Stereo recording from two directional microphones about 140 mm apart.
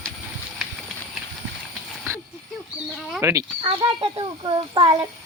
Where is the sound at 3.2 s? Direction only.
20° right (ahead or behind).